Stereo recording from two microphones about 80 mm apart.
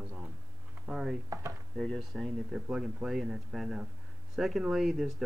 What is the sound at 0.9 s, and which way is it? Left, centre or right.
Speech, centre.